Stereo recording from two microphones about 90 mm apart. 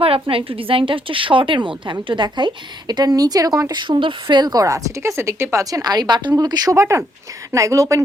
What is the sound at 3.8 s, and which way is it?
Speech, 65° right (ahead or behind).